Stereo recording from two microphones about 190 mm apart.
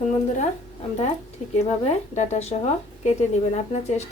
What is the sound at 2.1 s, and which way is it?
A woman's voice, 35° left (ahead or behind).